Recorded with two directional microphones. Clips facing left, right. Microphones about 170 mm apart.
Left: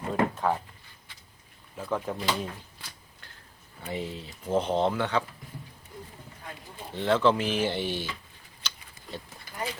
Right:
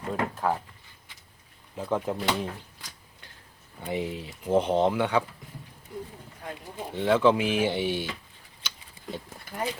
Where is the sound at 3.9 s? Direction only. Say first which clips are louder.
Right 4 dB; 15° right (ahead or behind).